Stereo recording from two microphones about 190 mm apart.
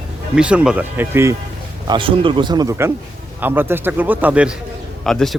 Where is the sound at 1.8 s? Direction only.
25° right (ahead or behind).